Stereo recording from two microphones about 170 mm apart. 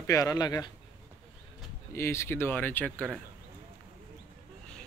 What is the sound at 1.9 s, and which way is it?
Speech, 15° left (ahead or behind).